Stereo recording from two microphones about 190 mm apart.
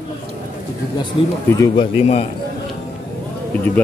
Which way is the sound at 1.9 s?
30° left (ahead or behind).